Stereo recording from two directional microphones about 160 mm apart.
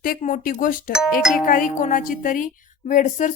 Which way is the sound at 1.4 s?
55° left (ahead or behind).